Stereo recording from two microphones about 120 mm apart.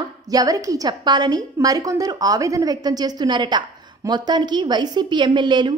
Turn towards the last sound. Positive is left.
turn(degrees=-40)  # may be behind; listen again after turning